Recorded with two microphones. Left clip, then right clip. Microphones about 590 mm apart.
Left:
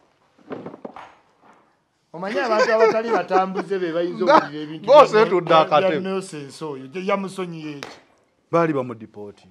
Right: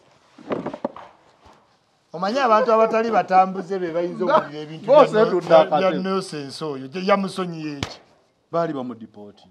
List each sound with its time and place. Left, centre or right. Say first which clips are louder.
2.1 s a man's voice: right 2 dB; centre
4.2 s a man's voice: left 4 dB; left
4.5 s a man's voice: left 2 dB; centre
4.8 s a man's voice: left 2 dB; left
6.0 s a man's voice: right 2 dB; centre
8.5 s a man's voice: left 4 dB; left